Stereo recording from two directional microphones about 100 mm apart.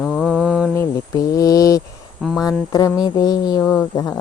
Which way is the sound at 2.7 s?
35° left (ahead or behind).